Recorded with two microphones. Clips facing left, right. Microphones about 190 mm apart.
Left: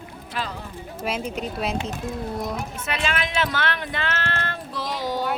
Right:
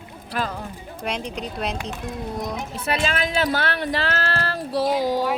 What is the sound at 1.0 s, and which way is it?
Speech, 5° left (ahead or behind).